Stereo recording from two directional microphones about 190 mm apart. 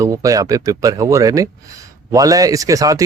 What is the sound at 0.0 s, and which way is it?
Speech, 20° right (ahead or behind).